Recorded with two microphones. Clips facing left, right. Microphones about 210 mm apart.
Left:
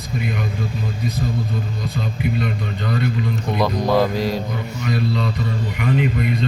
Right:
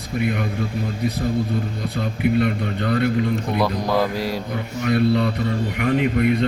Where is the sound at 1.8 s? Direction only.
60° right (ahead or behind).